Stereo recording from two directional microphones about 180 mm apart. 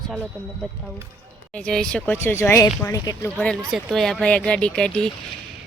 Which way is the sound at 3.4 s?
Centre (ahead or behind).